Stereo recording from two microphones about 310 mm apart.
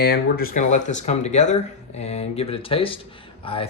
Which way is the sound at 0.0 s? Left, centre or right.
Left.